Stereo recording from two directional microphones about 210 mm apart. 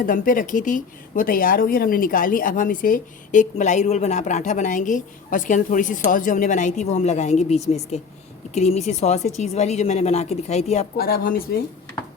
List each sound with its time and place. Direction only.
0.0 s speech: 40° left (ahead or behind)
10.9 s speech: 45° left (ahead or behind)